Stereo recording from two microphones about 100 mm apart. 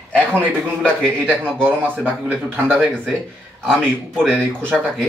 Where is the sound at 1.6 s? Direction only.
20° right (ahead or behind).